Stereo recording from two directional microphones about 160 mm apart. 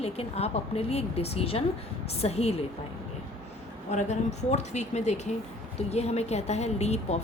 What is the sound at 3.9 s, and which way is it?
A woman's voice, 45° left (ahead or behind).